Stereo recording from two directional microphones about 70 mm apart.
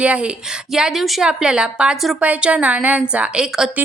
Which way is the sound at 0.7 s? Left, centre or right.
Centre.